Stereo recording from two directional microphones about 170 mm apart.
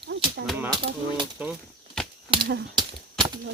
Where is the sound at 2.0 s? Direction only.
5° left (ahead or behind).